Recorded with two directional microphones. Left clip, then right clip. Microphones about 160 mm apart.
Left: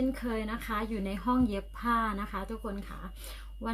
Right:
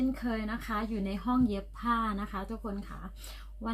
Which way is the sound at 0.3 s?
5° left (ahead or behind).